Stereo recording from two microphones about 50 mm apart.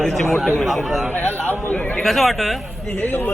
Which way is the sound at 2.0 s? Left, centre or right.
Centre.